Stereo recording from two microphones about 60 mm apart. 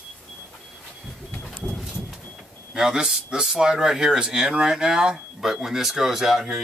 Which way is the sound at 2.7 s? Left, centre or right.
Centre.